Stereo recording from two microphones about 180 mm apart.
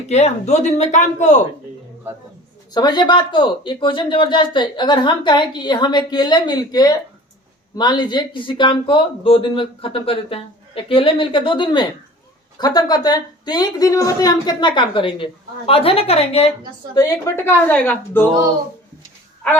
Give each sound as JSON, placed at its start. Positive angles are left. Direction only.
{"t": 0.1, "sound": "a woman's voice", "side_deg": 40}
{"t": 2.7, "sound": "a woman's voice", "side_deg": 25}
{"t": 16.9, "sound": "a woman's voice", "side_deg": 15}